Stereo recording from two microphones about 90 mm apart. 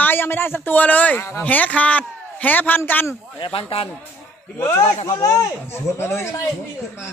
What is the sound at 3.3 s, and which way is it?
Speech, 75° left (ahead or behind).